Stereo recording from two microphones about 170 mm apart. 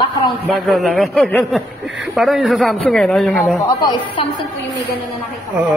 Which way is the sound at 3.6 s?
30° left (ahead or behind).